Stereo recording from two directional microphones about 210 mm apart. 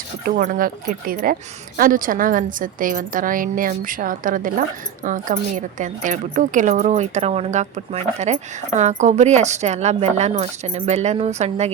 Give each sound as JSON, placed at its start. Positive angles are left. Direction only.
{"t": 0.3, "sound": "a woman's voice", "side_deg": -40}
{"t": 8.8, "sound": "a woman's voice", "side_deg": -35}